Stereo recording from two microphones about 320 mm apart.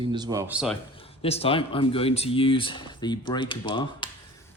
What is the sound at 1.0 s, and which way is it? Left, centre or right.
Speech, centre.